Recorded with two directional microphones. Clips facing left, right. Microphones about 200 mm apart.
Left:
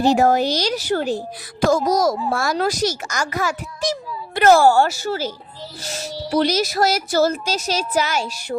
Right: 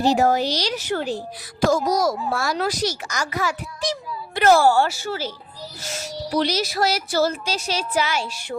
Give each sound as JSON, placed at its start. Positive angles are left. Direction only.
{"t": 0.0, "sound": "speech", "side_deg": 55}